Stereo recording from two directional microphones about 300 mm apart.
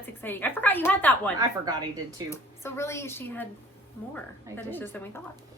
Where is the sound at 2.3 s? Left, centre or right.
Centre.